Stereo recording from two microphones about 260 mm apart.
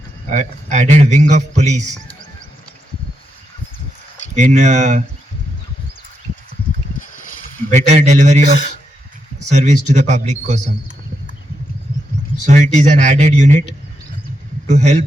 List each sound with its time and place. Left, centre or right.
0.3 s a man's voice: right
4.4 s a man's voice: right
7.0 s a sound: left
7.7 s a man's voice: right
9.5 s a man's voice: right
12.4 s a man's voice: right
14.7 s a man's voice: right